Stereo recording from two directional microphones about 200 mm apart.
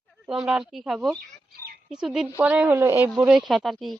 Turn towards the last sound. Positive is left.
turn(degrees=0)  # may be behind; listen again after turning